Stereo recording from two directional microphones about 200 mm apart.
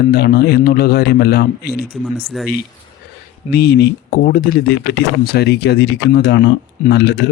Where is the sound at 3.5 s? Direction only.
55° left (ahead or behind).